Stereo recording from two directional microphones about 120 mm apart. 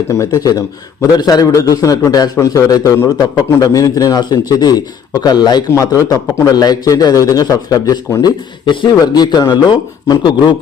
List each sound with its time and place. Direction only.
0.1 s a man's voice: 25° left (ahead or behind)